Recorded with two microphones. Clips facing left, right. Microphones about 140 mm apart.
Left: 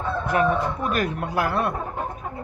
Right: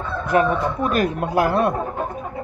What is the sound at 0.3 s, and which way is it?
Speech, 25° right (ahead or behind).